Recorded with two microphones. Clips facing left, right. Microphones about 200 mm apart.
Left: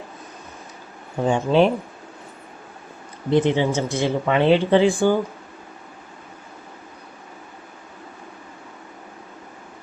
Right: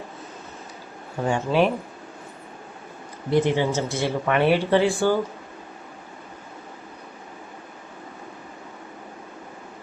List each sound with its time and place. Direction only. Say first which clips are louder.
1.2 s speech: left 4 dB; 20° left (ahead or behind)
3.2 s speech: left 2 dB; 20° left (ahead or behind)